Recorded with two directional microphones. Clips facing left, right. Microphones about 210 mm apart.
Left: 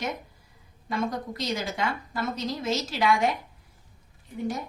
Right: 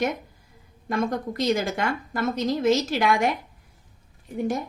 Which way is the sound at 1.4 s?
55° right (ahead or behind).